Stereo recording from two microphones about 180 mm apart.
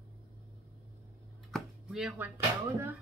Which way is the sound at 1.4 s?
Centre (ahead or behind).